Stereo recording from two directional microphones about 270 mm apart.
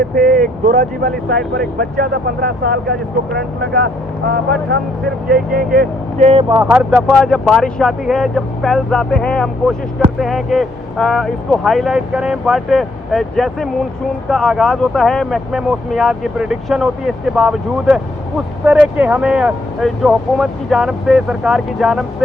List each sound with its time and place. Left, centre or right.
0.1 s speech: right
5.3 s speech: right
6.5 s speech: centre